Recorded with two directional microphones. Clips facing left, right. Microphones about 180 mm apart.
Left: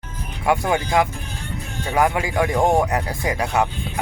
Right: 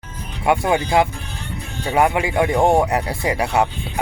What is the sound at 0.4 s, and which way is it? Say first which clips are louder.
Speech: right 2 dB; 25° right (ahead or behind).